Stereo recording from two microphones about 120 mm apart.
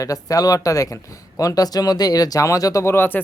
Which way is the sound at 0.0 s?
30° left (ahead or behind).